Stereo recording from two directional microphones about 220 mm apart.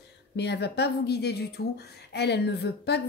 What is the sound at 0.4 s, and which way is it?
A woman's voice, 50° left (ahead or behind).